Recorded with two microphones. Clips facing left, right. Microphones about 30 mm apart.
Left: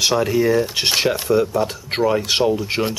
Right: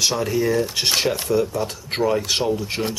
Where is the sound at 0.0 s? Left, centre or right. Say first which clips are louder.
Left 4 dB; centre.